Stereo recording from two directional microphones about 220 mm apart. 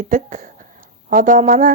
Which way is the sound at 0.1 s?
35° right (ahead or behind).